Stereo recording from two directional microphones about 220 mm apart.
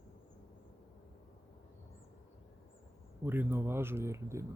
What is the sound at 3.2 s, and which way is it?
Speech, 10° right (ahead or behind).